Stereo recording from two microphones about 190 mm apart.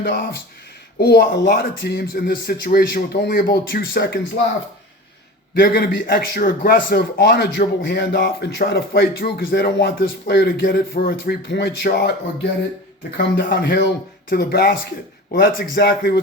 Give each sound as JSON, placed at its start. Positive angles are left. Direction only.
{"t": 0.0, "sound": "speech", "side_deg": 55}
{"t": 5.6, "sound": "a man's voice", "side_deg": 50}
{"t": 7.2, "sound": "speech", "side_deg": 60}
{"t": 13.1, "sound": "a man's voice", "side_deg": 65}